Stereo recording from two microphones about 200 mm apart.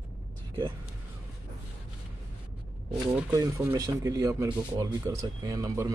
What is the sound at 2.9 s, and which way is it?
Speech, 10° right (ahead or behind).